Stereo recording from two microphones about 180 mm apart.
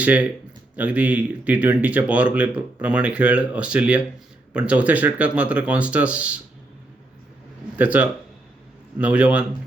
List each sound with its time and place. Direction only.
0.0 s speech: 10° right (ahead or behind)
7.8 s speech: 10° right (ahead or behind)